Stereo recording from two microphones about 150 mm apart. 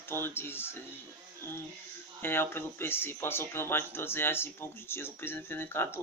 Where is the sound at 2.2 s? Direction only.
15° left (ahead or behind).